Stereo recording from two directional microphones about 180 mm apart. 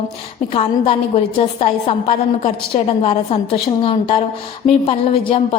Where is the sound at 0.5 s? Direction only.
35° left (ahead or behind).